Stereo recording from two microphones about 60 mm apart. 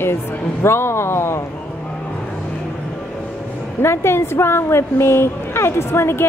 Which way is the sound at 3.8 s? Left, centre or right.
Left.